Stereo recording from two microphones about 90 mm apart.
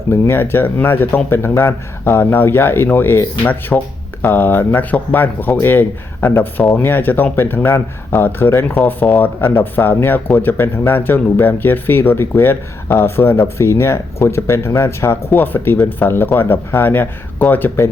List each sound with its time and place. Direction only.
0.1 s speech: 25° left (ahead or behind)